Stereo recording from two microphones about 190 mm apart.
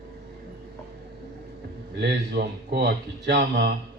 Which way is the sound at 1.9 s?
60° right (ahead or behind).